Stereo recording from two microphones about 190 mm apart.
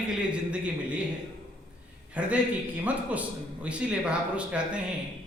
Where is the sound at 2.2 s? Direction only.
5° right (ahead or behind).